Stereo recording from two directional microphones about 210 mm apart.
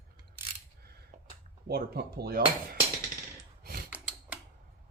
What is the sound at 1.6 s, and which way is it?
Speech, 50° right (ahead or behind).